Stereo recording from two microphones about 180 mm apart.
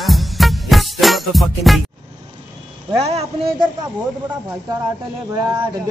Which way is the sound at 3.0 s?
35° right (ahead or behind).